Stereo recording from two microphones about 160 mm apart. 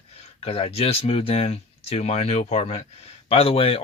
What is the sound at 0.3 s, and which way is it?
Speech, 40° left (ahead or behind).